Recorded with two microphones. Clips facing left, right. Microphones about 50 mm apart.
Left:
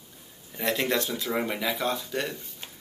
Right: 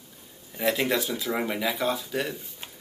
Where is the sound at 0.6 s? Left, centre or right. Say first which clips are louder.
Right 2 dB; centre.